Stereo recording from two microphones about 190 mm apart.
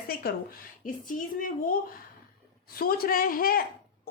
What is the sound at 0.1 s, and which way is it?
Speech, 55° left (ahead or behind).